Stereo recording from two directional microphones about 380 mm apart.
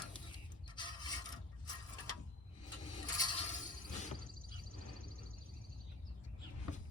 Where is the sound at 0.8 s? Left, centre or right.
Centre.